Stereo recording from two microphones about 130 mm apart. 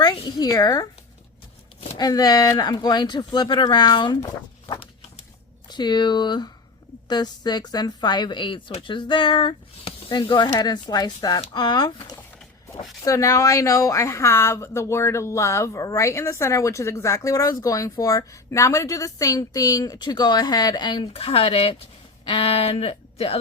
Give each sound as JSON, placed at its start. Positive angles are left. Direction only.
{"t": 0.0, "sound": "a woman's voice", "side_deg": 30}
{"t": 2.0, "sound": "speech", "side_deg": 30}
{"t": 5.6, "sound": "a woman's voice", "side_deg": 35}